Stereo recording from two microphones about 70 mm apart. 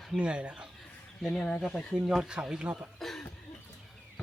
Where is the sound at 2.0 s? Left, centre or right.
Centre.